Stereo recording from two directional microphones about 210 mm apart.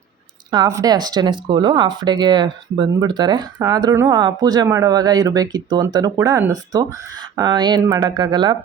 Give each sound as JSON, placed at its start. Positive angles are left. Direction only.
{"t": 0.5, "sound": "speech", "side_deg": -15}